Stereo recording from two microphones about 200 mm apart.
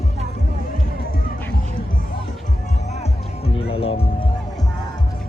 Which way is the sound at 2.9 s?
30° left (ahead or behind).